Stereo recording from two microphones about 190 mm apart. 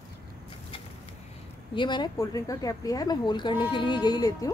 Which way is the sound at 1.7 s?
25° left (ahead or behind).